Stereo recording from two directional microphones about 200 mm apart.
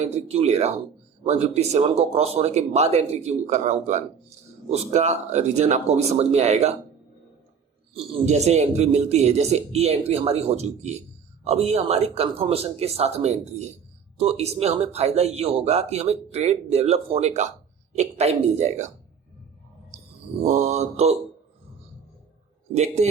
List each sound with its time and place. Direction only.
0.0 s speech: 30° right (ahead or behind)
7.9 s speech: 35° right (ahead or behind)
20.4 s speech: 35° right (ahead or behind)
22.7 s speech: 35° right (ahead or behind)